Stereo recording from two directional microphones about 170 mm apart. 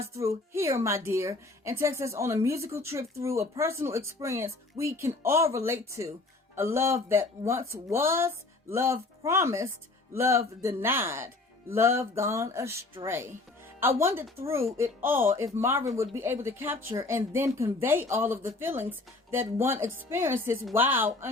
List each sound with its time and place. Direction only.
0.0 s speech: 15° right (ahead or behind)
13.7 s speech: 15° right (ahead or behind)